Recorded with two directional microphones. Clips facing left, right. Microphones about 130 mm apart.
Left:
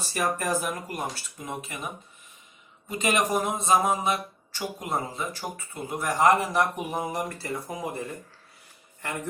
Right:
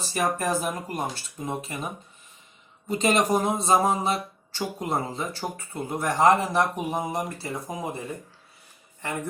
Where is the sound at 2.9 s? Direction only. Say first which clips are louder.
Right 3 dB; 30° right (ahead or behind).